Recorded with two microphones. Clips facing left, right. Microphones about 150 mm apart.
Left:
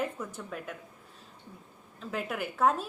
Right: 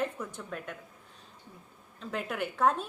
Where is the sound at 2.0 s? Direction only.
Centre (ahead or behind).